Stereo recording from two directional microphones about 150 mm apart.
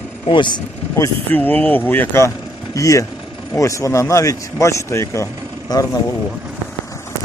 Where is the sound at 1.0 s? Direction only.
10° left (ahead or behind).